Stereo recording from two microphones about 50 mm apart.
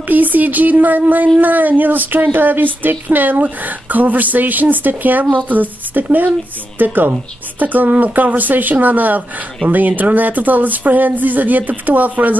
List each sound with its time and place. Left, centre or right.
0.1 s speech: right